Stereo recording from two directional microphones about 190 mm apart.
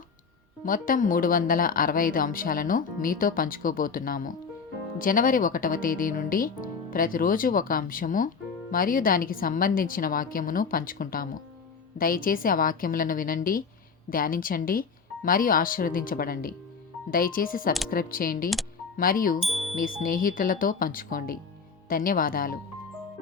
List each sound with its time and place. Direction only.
0.6 s speech: 45° left (ahead or behind)
19.4 s music: centre (ahead or behind)
20.0 s speech: 50° left (ahead or behind)